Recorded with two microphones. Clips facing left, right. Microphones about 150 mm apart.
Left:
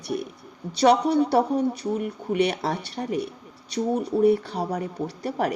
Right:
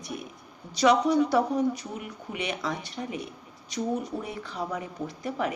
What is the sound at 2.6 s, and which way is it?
Speech, 35° left (ahead or behind).